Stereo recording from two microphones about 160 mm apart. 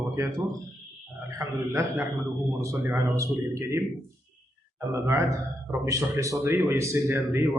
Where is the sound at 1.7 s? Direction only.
20° right (ahead or behind).